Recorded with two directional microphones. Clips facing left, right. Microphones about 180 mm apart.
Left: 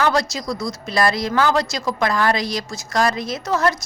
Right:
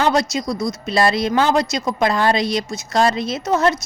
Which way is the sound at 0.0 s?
20° right (ahead or behind).